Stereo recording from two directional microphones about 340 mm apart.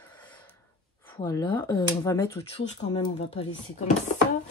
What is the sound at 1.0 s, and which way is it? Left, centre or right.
Speech, centre.